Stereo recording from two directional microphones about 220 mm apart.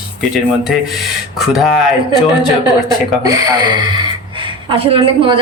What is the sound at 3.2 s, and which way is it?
A woman's voice, 15° right (ahead or behind).